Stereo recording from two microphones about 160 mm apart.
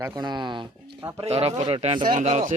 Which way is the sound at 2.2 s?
45° right (ahead or behind).